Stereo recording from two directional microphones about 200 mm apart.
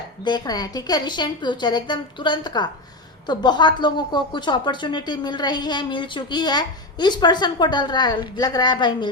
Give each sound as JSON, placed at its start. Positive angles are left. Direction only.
{"t": 0.3, "sound": "a woman's voice", "side_deg": 20}